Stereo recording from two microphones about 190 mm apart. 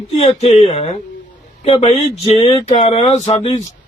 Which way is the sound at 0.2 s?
35° left (ahead or behind).